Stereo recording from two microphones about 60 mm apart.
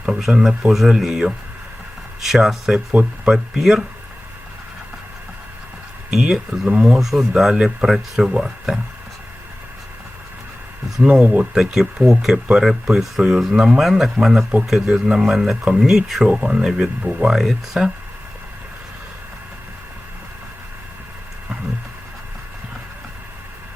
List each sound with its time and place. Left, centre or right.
0.2 s speech: centre
2.9 s speech: centre
6.1 s speech: centre
7.0 s speech: centre
10.9 s speech: centre
16.2 s speech: centre